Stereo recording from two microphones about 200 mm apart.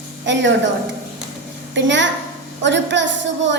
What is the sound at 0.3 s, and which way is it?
Speech, 65° right (ahead or behind).